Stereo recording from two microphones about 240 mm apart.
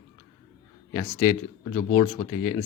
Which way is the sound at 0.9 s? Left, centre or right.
Centre.